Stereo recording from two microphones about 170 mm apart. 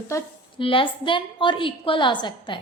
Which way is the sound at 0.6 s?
30° left (ahead or behind).